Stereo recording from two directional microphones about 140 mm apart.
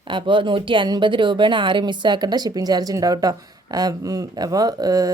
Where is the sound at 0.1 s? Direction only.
35° right (ahead or behind).